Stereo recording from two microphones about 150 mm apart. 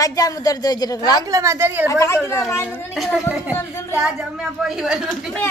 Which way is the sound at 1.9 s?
20° left (ahead or behind).